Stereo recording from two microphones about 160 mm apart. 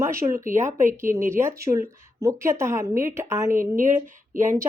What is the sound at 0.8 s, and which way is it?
Speech, 55° right (ahead or behind).